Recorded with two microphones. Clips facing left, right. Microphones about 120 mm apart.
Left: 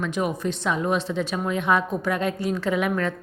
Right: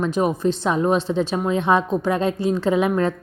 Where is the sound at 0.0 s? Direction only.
35° right (ahead or behind).